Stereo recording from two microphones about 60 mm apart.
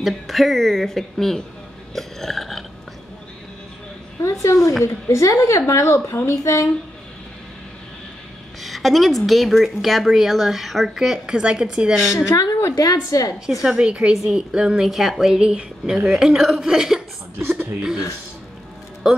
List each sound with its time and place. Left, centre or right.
0.0 s a woman's voice: centre
2.0 s burping: centre
4.2 s a woman's voice: left
8.6 s a woman's voice: centre
12.3 s a woman's voice: left
12.7 s a woman's voice: left
13.5 s speech: centre
14.9 s speech: centre